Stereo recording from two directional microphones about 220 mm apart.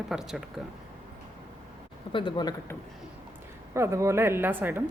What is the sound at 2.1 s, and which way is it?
Speech, 20° left (ahead or behind).